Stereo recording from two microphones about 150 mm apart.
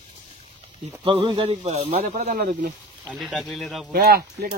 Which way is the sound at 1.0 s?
35° right (ahead or behind).